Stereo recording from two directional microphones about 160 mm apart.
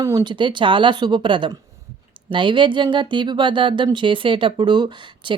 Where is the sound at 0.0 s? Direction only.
20° right (ahead or behind).